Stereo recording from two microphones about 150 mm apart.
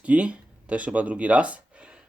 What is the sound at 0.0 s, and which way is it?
Speech, 10° right (ahead or behind).